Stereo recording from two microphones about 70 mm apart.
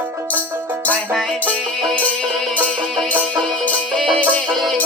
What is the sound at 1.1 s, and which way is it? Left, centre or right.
Music, centre.